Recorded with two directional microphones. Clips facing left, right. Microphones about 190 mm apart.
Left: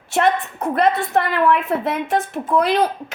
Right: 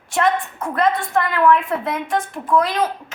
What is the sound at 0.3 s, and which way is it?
Speech, 35° left (ahead or behind).